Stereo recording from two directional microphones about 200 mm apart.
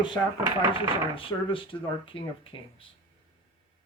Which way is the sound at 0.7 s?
25° left (ahead or behind).